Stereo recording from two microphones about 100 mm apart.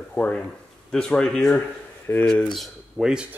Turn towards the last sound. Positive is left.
turn(degrees=-5)  # may be behind; listen again after turning